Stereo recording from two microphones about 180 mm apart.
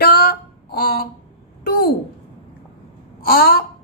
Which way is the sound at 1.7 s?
55° left (ahead or behind).